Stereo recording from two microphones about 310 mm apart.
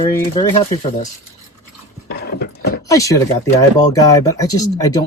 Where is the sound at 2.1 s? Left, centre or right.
Left.